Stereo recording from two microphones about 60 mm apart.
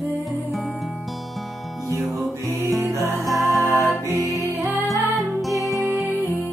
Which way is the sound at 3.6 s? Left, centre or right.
Left.